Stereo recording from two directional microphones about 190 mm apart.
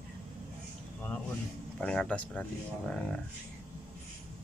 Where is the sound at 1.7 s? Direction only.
5° left (ahead or behind).